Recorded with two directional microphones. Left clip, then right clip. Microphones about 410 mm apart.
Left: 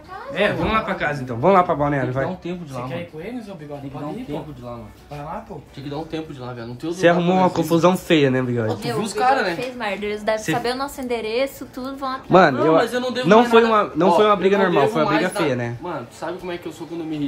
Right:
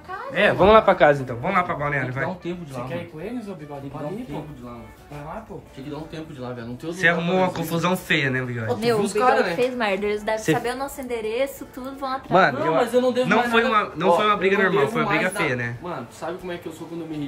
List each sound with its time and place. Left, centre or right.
0.3 s speech: centre
1.5 s a man's voice: centre
6.4 s a man's voice: centre
9.7 s a woman's voice: centre
10.0 s a man's voice: centre